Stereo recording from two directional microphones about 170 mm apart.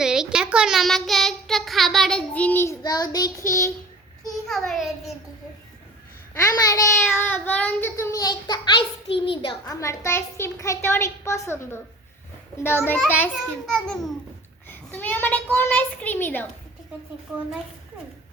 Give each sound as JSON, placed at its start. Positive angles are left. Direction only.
{"t": 0.0, "sound": "a child's voice", "side_deg": -5}
{"t": 4.3, "sound": "a child's voice", "side_deg": 0}
{"t": 6.5, "sound": "a child's voice", "side_deg": 20}
{"t": 7.3, "sound": "a child's voice", "side_deg": 10}